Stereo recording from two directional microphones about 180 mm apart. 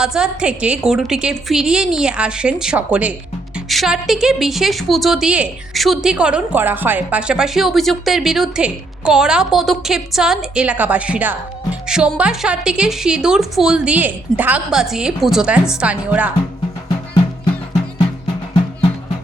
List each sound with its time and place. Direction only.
0.0 s a woman's voice: 5° right (ahead or behind)